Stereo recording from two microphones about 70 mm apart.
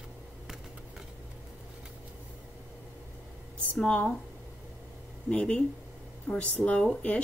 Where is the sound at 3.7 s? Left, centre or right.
Centre.